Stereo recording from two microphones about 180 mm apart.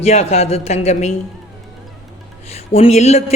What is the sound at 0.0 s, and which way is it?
A man's voice, 35° left (ahead or behind).